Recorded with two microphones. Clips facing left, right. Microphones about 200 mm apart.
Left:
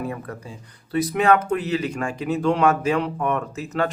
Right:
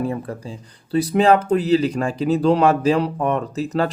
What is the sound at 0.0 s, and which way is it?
Speech, 30° right (ahead or behind).